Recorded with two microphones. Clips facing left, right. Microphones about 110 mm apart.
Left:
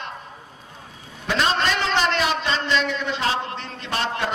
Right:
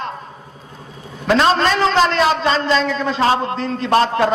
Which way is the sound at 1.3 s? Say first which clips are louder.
Right 7 dB; 40° right (ahead or behind).